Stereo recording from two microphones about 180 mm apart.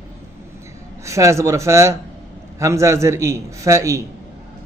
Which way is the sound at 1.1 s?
15° right (ahead or behind).